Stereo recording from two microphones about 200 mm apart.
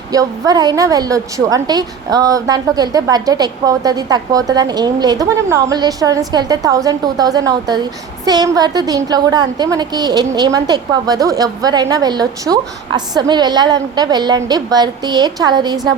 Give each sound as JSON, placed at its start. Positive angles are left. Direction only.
{"t": 0.1, "sound": "a woman's voice", "side_deg": -20}